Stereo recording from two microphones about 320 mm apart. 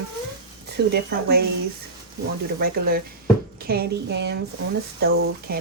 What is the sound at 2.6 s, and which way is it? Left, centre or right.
Speech, right.